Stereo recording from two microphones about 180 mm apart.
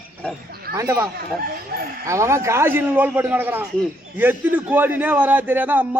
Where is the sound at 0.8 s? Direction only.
20° right (ahead or behind).